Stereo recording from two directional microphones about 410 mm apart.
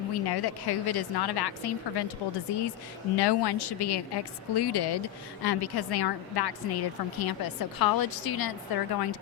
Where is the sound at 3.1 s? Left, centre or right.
Left.